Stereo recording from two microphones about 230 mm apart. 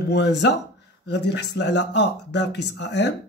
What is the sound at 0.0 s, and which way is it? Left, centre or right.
Speech, left.